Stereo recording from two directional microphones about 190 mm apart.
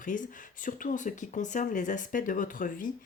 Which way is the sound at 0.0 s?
45° left (ahead or behind).